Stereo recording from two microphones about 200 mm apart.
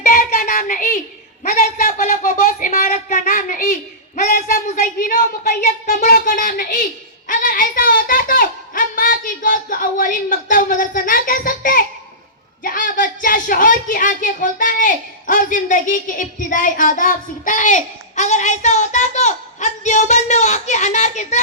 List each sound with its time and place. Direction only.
0.0 s child singing: 45° left (ahead or behind)
1.5 s speech: 45° left (ahead or behind)